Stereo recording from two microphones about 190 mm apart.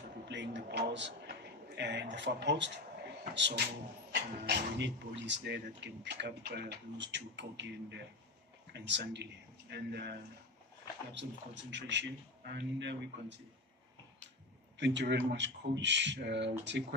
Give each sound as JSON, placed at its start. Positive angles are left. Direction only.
{"t": 0.2, "sound": "a sound", "side_deg": -70}
{"t": 1.8, "sound": "speech", "side_deg": -65}
{"t": 11.1, "sound": "speech", "side_deg": -70}
{"t": 14.8, "sound": "speech", "side_deg": -65}